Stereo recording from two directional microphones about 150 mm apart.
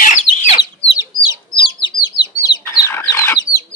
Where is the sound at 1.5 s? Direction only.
30° left (ahead or behind).